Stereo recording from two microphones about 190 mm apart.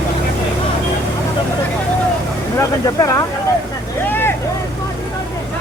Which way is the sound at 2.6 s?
20° left (ahead or behind).